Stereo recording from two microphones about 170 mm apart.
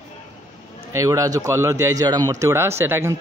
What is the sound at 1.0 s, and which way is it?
Speech, 20° right (ahead or behind).